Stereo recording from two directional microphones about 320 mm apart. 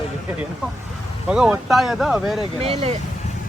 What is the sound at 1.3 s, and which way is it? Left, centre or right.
Speech, centre.